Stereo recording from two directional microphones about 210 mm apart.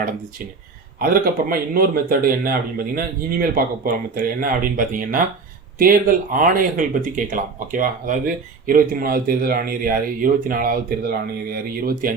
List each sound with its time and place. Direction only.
0.9 s speech: 45° right (ahead or behind)